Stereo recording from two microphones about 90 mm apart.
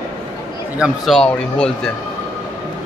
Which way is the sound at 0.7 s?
10° right (ahead or behind).